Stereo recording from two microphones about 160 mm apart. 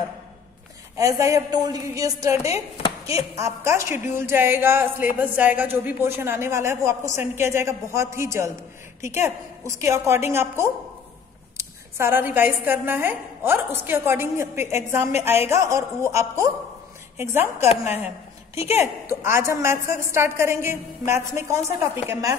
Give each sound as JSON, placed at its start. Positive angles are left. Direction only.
{"t": 0.9, "sound": "a woman's voice", "side_deg": -20}
{"t": 17.8, "sound": "a sound", "side_deg": -15}
{"t": 18.8, "sound": "a woman's voice", "side_deg": -15}